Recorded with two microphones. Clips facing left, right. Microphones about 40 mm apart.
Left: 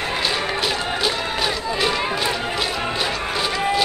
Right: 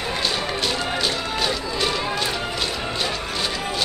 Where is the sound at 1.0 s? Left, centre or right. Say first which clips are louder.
Left 2 dB; centre.